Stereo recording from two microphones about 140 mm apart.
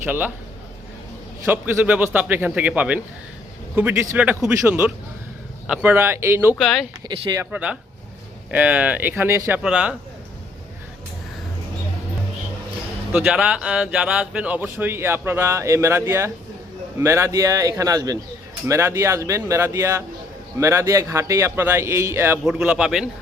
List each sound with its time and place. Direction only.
0.0 s speech: 10° right (ahead or behind)
1.5 s speech: 15° right (ahead or behind)
4.4 s speech: 5° right (ahead or behind)
6.6 s a man's voice: centre (ahead or behind)
7.0 s speech: 30° right (ahead or behind)
7.5 s speech: 10° right (ahead or behind)
9.6 s speech: 5° right (ahead or behind)
13.1 s a man's voice: 5° right (ahead or behind)
22.4 s a man's voice: 5° right (ahead or behind)